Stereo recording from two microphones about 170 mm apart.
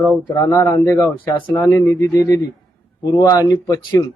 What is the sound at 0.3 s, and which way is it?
Speech, 20° left (ahead or behind).